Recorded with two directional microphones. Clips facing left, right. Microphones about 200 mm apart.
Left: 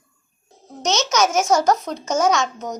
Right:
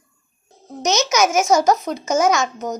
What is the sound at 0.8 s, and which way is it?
A child's voice, 10° right (ahead or behind).